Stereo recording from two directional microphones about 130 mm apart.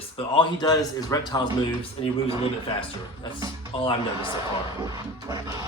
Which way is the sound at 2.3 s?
50° left (ahead or behind).